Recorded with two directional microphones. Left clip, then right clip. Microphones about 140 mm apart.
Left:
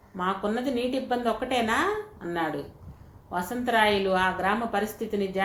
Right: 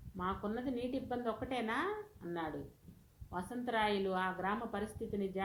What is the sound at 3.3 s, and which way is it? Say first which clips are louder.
A woman's voice: left 13 dB; 30° right (ahead or behind).